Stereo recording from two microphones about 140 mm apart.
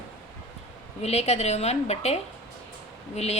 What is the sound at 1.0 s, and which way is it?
A woman's voice, 50° left (ahead or behind).